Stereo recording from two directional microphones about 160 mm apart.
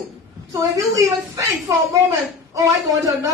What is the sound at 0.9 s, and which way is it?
A woman's voice, 20° right (ahead or behind).